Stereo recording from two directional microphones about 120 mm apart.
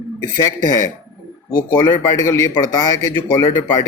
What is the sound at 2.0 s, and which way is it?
Speech, 25° left (ahead or behind).